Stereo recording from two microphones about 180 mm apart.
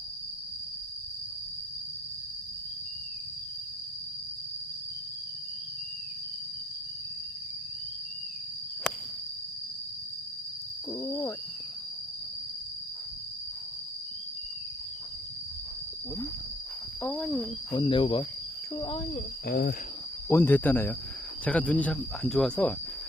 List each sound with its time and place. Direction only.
11.0 s a sound: 20° left (ahead or behind)
17.0 s speech: 5° left (ahead or behind)
17.7 s speech: 30° left (ahead or behind)
19.5 s cricket: 55° left (ahead or behind)
20.2 s speech: 15° left (ahead or behind)